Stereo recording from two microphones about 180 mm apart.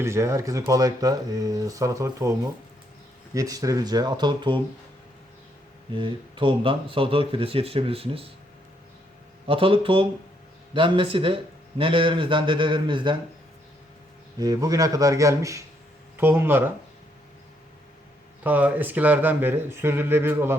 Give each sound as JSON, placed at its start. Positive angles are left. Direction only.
{"t": 0.0, "sound": "speech", "side_deg": -15}
{"t": 5.9, "sound": "speech", "side_deg": -25}
{"t": 9.5, "sound": "speech", "side_deg": -30}
{"t": 14.3, "sound": "speech", "side_deg": -20}
{"t": 18.4, "sound": "speech", "side_deg": -10}